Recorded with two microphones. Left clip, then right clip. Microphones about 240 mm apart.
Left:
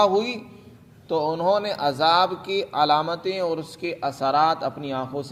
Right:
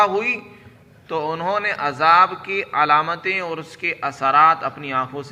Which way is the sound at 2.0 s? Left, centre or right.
Left.